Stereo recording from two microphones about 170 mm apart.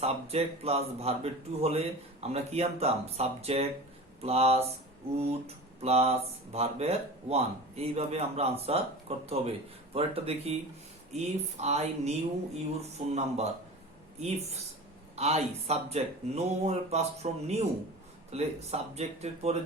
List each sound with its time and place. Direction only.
0.0 s speech: 35° right (ahead or behind)
13.1 s speech: 40° right (ahead or behind)